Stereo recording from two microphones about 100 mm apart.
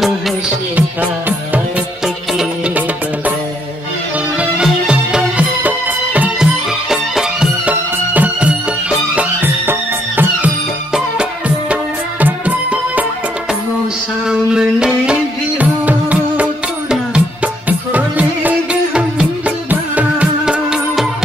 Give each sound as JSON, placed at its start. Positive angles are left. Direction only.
{"t": 4.4, "sound": "music", "side_deg": -10}
{"t": 14.3, "sound": "a sound", "side_deg": -10}
{"t": 15.6, "sound": "music", "side_deg": -15}
{"t": 17.6, "sound": "music", "side_deg": -15}